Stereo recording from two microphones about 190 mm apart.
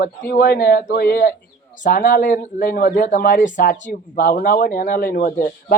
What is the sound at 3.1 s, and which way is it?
Speech, 45° left (ahead or behind).